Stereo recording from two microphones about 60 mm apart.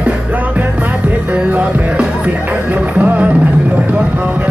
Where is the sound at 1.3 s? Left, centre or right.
Right.